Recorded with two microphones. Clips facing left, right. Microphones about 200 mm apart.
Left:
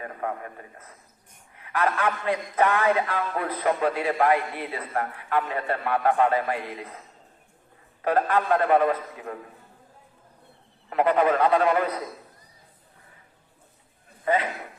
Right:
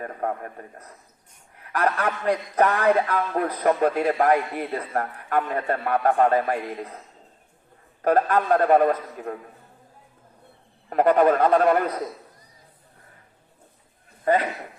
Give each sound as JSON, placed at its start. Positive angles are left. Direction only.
{"t": 0.0, "sound": "a man's voice", "side_deg": -45}
{"t": 8.0, "sound": "a man's voice", "side_deg": -45}
{"t": 10.8, "sound": "a man's voice", "side_deg": -45}